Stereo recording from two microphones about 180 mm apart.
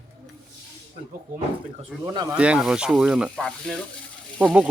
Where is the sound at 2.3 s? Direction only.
5° right (ahead or behind).